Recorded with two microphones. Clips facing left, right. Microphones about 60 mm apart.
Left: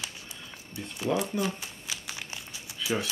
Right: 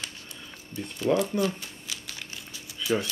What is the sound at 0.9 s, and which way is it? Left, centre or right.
Speech, centre.